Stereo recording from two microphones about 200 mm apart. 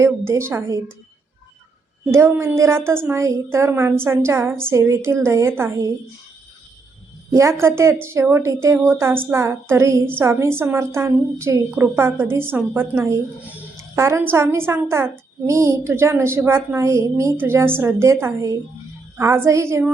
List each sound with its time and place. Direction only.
0.0 s a woman's voice: 15° right (ahead or behind)
2.0 s a woman's voice: 15° right (ahead or behind)
7.3 s a woman's voice: 15° right (ahead or behind)